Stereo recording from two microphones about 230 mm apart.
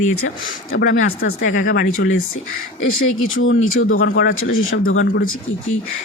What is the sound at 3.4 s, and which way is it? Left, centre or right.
Speech, left.